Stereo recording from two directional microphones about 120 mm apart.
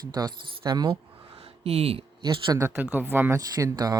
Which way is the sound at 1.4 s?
55° right (ahead or behind).